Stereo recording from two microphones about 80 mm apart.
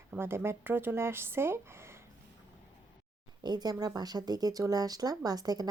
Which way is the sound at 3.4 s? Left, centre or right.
Right.